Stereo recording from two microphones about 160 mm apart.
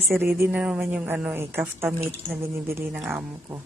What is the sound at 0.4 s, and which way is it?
A woman's voice, 5° right (ahead or behind).